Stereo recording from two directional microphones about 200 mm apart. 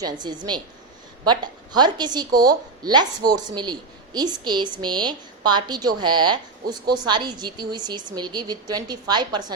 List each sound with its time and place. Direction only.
0.0 s a woman's voice: 20° right (ahead or behind)